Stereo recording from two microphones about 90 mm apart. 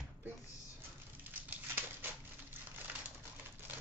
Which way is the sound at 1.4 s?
20° right (ahead or behind).